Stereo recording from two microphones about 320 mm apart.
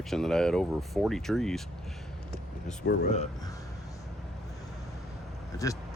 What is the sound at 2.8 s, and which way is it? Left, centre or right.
Speech, left.